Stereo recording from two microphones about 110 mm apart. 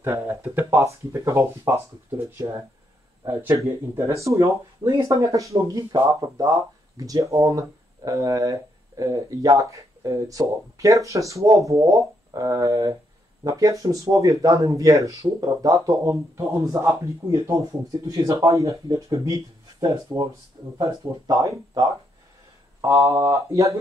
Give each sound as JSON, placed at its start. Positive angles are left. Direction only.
{"t": 0.0, "sound": "speech", "side_deg": -20}